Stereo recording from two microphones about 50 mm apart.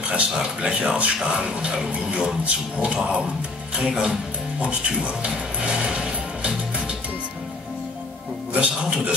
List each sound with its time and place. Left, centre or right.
0.4 s speech: centre
4.6 s music: right
8.5 s speech: right